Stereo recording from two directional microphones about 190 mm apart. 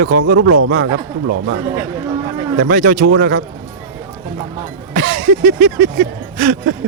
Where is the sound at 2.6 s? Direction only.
45° right (ahead or behind).